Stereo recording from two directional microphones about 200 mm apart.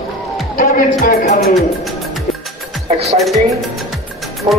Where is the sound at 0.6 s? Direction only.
45° left (ahead or behind).